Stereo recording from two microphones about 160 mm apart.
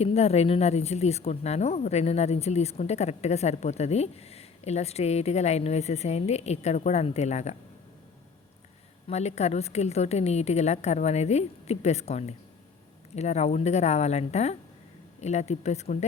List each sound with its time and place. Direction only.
0.0 s speech: 40° left (ahead or behind)
9.0 s speech: 45° left (ahead or behind)